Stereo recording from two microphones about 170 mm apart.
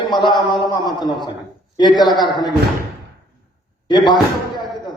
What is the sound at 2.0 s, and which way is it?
Speech, 25° left (ahead or behind).